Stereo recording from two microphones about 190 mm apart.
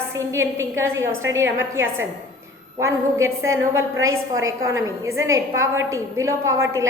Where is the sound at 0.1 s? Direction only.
15° right (ahead or behind).